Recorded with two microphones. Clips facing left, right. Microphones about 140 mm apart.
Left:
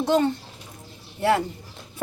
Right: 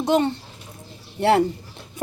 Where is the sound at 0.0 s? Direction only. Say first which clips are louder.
Right 1 dB; 20° right (ahead or behind).